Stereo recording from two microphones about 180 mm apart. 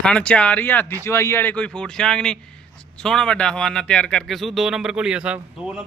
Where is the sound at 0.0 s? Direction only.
5° left (ahead or behind).